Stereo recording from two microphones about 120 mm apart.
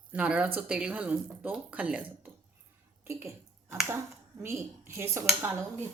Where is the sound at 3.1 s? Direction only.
25° right (ahead or behind).